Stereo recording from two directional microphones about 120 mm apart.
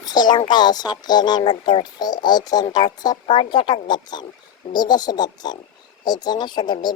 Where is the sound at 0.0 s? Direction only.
35° left (ahead or behind).